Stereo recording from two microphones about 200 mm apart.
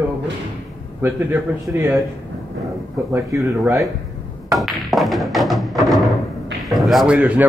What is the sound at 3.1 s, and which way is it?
Speech, 15° right (ahead or behind).